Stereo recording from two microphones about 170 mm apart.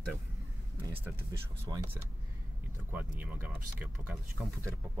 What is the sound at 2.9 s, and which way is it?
Speech, 10° right (ahead or behind).